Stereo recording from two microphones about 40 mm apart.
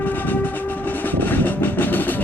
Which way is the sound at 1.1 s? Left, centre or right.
Left.